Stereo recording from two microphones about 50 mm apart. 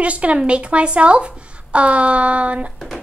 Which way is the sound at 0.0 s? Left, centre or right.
Right.